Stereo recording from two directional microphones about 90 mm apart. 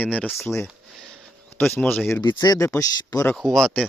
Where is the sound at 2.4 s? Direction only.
40° left (ahead or behind).